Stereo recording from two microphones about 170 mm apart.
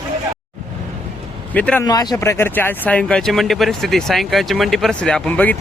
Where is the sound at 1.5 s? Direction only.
10° left (ahead or behind).